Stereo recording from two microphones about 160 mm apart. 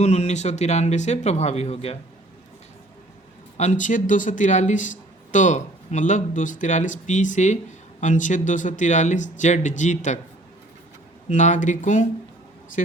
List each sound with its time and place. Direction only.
0.0 s speech: 45° left (ahead or behind)
3.6 s speech: 50° left (ahead or behind)
11.3 s speech: 50° left (ahead or behind)